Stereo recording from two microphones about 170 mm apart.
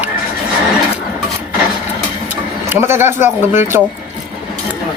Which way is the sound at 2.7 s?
15° right (ahead or behind).